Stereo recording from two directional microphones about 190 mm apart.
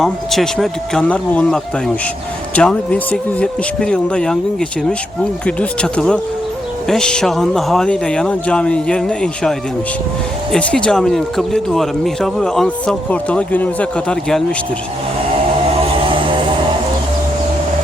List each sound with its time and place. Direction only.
0.0 s speech: centre (ahead or behind)
5.5 s speech: 5° left (ahead or behind)
16.0 s vehicle: 30° right (ahead or behind)